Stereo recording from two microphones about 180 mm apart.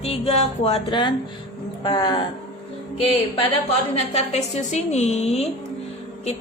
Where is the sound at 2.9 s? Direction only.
30° left (ahead or behind).